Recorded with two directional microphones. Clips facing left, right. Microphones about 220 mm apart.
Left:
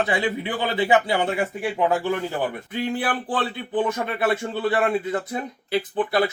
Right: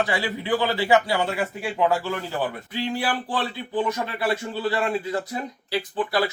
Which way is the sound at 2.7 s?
55° left (ahead or behind).